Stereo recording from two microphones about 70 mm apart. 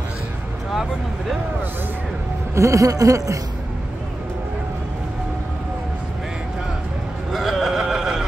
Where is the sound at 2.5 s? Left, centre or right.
Right.